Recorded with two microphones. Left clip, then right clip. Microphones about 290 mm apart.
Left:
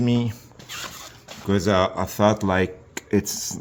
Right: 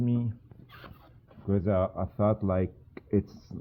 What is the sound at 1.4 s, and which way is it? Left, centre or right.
Speech, centre.